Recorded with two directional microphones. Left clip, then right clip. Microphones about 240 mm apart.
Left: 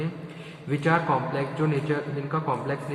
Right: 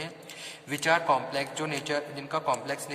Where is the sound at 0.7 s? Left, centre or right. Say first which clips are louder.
Left 1 dB; right.